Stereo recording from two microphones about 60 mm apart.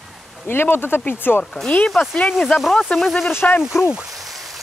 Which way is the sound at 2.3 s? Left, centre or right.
Centre.